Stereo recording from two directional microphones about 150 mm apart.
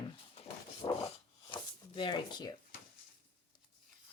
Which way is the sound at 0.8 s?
30° left (ahead or behind).